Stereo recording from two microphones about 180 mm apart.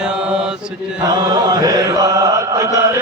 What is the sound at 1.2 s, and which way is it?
Chant, 20° right (ahead or behind).